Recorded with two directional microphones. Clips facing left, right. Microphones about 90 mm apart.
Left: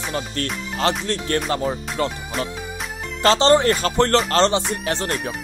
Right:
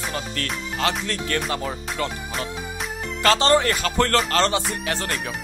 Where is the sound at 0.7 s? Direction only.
35° left (ahead or behind).